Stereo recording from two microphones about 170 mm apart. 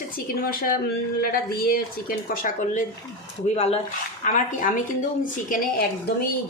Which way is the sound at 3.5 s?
40° left (ahead or behind).